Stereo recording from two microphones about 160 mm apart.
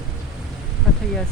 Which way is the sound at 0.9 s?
Centre (ahead or behind).